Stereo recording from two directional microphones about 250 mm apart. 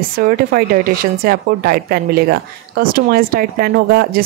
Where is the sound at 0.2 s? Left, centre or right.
Right.